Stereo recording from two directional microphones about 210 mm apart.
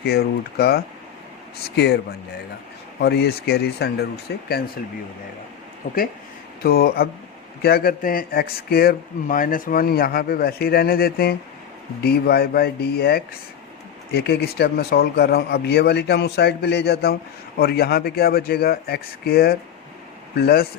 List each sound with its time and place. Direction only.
0.0 s speech: 50° left (ahead or behind)
5.8 s speech: 40° left (ahead or behind)